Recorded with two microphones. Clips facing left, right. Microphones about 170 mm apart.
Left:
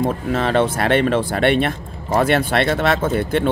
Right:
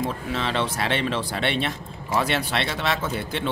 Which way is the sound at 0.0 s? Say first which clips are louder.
Left 7 dB; 50° left (ahead or behind).